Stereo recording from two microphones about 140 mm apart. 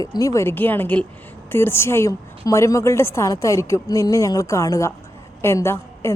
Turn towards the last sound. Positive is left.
turn(degrees=20)  # may be behind; listen again after turning